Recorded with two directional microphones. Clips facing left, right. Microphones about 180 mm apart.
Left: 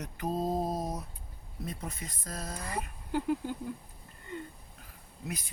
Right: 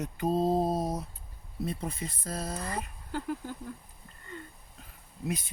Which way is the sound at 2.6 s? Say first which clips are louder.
Right 2 dB; 15° left (ahead or behind).